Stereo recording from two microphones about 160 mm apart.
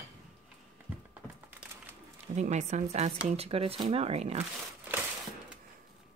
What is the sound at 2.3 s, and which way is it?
Speech, 45° right (ahead or behind).